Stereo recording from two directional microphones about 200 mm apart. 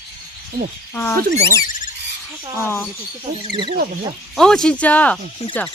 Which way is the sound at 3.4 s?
25° right (ahead or behind).